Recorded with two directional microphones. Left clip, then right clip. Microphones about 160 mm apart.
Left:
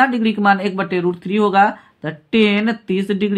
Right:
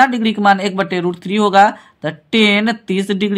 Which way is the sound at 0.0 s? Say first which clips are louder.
Right 3 dB; 30° right (ahead or behind).